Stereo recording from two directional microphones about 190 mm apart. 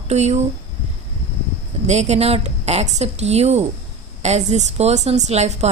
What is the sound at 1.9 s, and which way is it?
A woman's voice, 35° right (ahead or behind).